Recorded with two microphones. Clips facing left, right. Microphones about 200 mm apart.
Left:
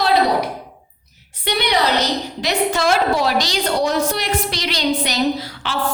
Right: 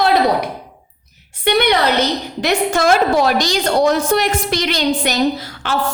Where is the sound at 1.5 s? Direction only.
55° right (ahead or behind).